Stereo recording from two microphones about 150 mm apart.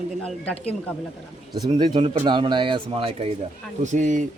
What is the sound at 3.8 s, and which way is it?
Speech, 55° right (ahead or behind).